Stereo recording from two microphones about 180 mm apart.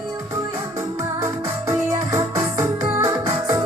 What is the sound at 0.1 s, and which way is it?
Music, 20° right (ahead or behind).